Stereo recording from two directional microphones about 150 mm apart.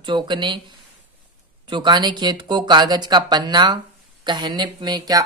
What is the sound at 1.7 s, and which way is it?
Speech, 30° right (ahead or behind).